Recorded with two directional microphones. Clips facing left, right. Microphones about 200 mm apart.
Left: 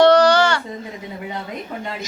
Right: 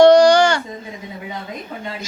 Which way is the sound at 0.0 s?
15° right (ahead or behind).